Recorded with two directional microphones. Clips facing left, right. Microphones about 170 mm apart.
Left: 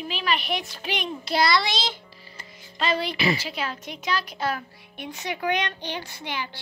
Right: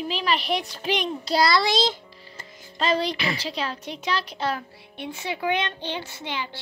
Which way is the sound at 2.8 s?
35° right (ahead or behind).